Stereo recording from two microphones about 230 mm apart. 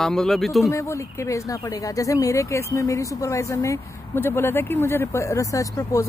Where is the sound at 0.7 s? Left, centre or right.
Centre.